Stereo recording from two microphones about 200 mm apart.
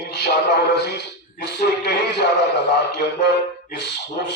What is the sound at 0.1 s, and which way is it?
A man's voice, 60° left (ahead or behind).